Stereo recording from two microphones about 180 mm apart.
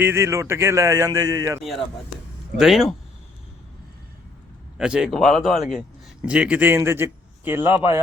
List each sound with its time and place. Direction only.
0.0 s a man's voice: 15° right (ahead or behind)
2.6 s speech: centre (ahead or behind)
4.8 s a man's voice: 5° right (ahead or behind)